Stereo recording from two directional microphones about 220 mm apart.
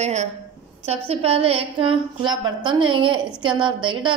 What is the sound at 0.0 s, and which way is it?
A woman's voice, 30° right (ahead or behind).